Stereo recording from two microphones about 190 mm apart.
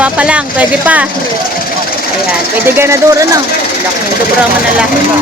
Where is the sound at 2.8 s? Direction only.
15° right (ahead or behind).